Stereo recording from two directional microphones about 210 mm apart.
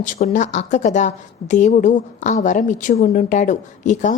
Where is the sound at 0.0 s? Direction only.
35° left (ahead or behind).